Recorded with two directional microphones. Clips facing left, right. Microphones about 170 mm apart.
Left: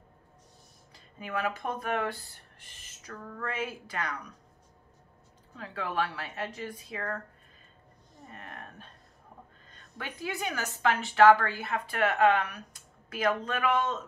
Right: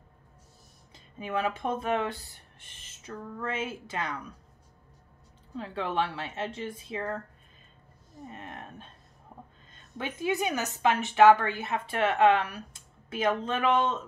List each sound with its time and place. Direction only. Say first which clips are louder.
0.9 s speech: right 3 dB; 20° right (ahead or behind)
5.6 s a woman's voice: right 2 dB; 25° right (ahead or behind)
8.3 s a woman's voice: right 2 dB; 20° right (ahead or behind)